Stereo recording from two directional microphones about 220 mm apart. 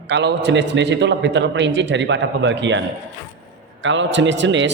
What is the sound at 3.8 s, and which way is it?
Speech, 55° right (ahead or behind).